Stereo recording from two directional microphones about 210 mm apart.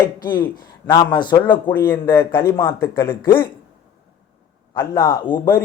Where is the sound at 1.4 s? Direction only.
10° left (ahead or behind).